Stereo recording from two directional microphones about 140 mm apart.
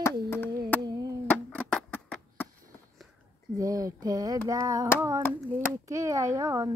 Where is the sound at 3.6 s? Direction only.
25° right (ahead or behind).